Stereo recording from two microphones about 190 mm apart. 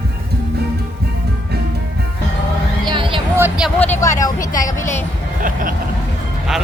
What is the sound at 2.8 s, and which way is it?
Music, 25° right (ahead or behind).